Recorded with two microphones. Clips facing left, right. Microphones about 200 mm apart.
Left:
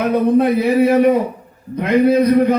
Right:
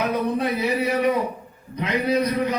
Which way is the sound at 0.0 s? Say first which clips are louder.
Left 9 dB; 55° left (ahead or behind).